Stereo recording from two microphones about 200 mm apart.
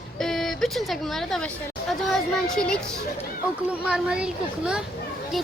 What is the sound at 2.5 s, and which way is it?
Speech, 5° left (ahead or behind).